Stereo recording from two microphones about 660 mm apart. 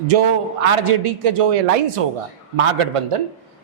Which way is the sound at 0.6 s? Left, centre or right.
Right.